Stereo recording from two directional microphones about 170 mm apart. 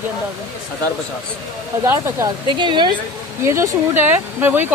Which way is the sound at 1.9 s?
15° right (ahead or behind).